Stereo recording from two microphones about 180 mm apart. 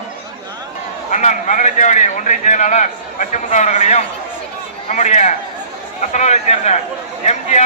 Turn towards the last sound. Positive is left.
turn(degrees=40)  # may be behind; listen again after turning